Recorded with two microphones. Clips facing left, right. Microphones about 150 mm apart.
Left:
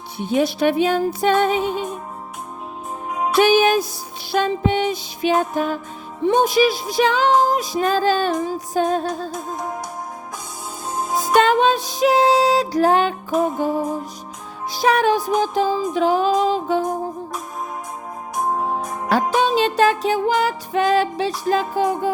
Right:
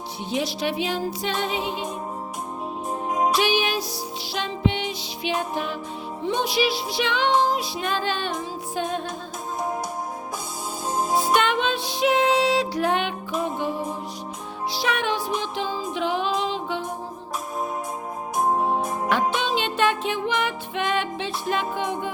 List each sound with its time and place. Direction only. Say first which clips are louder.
0.2 s music: left 8 dB; 50° left (ahead or behind)
3.3 s music: left 8 dB; 45° left (ahead or behind)
11.3 s music: left 7 dB; 40° left (ahead or behind)
18.3 s organ: even; 5° right (ahead or behind)
19.0 s music: left 8 dB; 40° left (ahead or behind)